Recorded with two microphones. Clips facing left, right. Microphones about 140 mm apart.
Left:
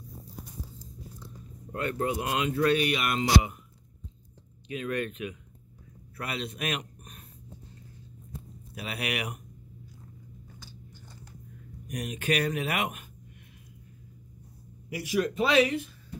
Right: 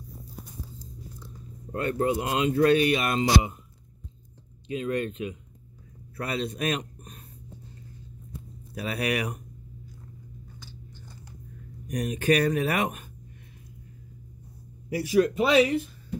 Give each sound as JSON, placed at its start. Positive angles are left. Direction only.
{"t": 1.7, "sound": "speech", "side_deg": -30}
{"t": 4.6, "sound": "speech", "side_deg": -30}
{"t": 8.7, "sound": "speech", "side_deg": -40}
{"t": 11.9, "sound": "speech", "side_deg": -40}
{"t": 14.9, "sound": "speech", "side_deg": -35}